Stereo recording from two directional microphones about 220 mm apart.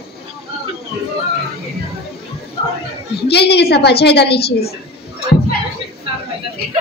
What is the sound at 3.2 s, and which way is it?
Speech, 50° left (ahead or behind).